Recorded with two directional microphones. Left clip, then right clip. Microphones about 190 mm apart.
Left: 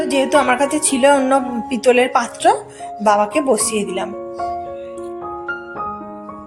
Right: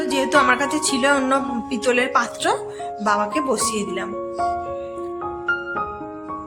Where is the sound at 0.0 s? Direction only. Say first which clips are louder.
Left 2 dB; 5° left (ahead or behind).